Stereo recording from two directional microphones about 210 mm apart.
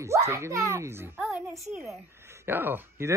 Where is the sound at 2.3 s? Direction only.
10° right (ahead or behind).